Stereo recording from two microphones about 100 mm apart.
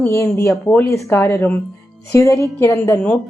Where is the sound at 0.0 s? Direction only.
25° left (ahead or behind).